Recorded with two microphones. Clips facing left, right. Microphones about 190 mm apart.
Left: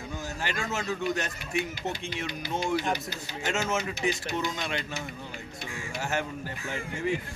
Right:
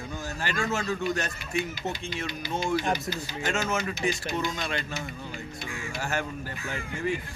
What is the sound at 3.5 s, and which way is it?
Speech, 25° left (ahead or behind).